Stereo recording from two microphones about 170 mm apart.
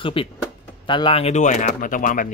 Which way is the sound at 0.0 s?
30° left (ahead or behind).